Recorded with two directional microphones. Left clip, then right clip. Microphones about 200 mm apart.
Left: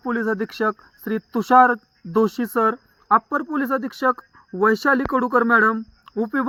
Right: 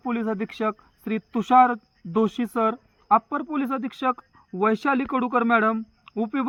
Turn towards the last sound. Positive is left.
turn(degrees=25)  # may be behind; listen again after turning